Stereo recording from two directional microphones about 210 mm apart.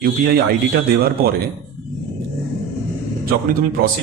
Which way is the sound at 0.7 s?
45° right (ahead or behind).